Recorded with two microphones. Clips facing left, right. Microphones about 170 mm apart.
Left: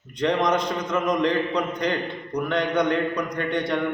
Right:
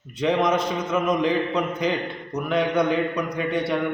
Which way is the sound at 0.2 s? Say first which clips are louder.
Right 1 dB; 5° right (ahead or behind).